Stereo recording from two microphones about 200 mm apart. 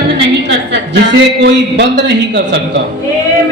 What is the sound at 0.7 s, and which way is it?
A man's voice, 60° right (ahead or behind).